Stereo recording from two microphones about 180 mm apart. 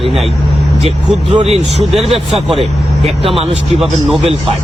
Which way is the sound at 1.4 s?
35° right (ahead or behind).